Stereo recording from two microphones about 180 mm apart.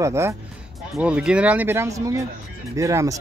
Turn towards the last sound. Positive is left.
turn(degrees=-20)  # may be behind; listen again after turning